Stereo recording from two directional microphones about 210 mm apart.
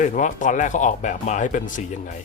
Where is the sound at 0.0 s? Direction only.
35° left (ahead or behind).